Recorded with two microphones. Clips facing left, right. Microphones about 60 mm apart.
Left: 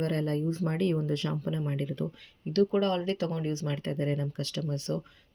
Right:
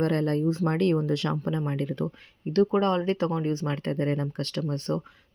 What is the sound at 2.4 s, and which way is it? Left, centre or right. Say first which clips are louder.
Speech: right 3 dB; right.